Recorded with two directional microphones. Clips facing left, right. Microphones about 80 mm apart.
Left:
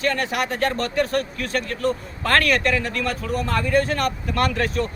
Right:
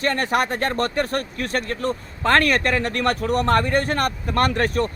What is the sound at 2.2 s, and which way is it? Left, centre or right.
Speech, right.